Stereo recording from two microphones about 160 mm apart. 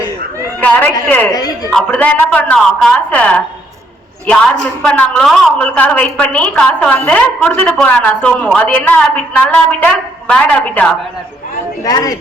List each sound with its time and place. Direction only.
0.6 s a sound: 10° left (ahead or behind)
1.0 s a woman's voice: 10° left (ahead or behind)
1.3 s speech: 25° left (ahead or behind)
1.7 s a woman's voice: 5° left (ahead or behind)
4.6 s a woman's voice: 5° left (ahead or behind)
11.9 s speech: 25° left (ahead or behind)